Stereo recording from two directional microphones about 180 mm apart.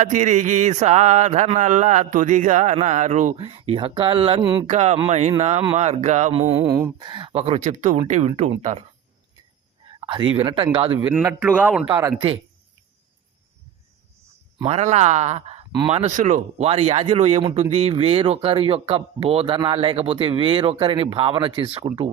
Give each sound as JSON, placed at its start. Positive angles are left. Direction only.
{"t": 0.0, "sound": "speech", "side_deg": -45}
{"t": 6.6, "sound": "a man's voice", "side_deg": -15}
{"t": 7.1, "sound": "speech", "side_deg": -30}
{"t": 10.1, "sound": "speech", "side_deg": -30}
{"t": 11.2, "sound": "a man's voice", "side_deg": -15}
{"t": 11.9, "sound": "speech", "side_deg": -20}
{"t": 14.6, "sound": "speech", "side_deg": -40}